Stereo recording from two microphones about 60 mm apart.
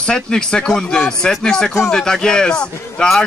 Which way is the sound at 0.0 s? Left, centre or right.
Centre.